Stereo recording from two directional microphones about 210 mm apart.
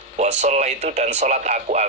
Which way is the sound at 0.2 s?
30° right (ahead or behind).